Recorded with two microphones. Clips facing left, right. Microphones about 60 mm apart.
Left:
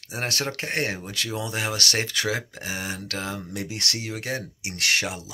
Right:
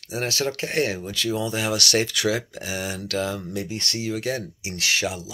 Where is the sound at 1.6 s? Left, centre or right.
Left.